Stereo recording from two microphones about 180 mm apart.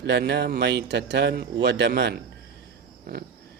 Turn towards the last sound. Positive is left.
turn(degrees=-60)  # may be behind; listen again after turning